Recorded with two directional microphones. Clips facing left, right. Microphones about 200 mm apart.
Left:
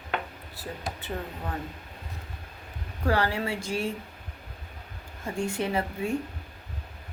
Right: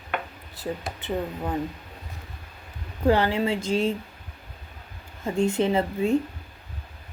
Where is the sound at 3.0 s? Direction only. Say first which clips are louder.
Right 5 dB; 20° right (ahead or behind).